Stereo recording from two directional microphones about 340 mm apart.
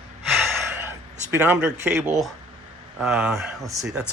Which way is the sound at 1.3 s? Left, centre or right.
Centre.